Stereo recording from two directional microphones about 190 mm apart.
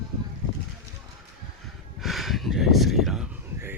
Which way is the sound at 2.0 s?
Centre (ahead or behind).